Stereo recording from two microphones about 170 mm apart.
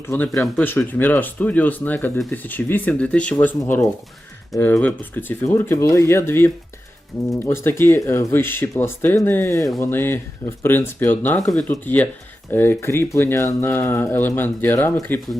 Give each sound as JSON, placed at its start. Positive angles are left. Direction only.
{"t": 0.1, "sound": "speech", "side_deg": 15}